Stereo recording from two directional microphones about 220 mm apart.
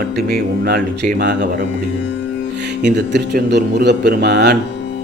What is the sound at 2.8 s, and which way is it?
Speech, 50° right (ahead or behind).